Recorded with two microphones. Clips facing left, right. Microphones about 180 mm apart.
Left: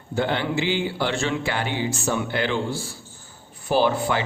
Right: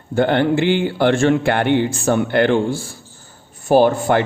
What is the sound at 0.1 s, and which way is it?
Speech, 55° right (ahead or behind).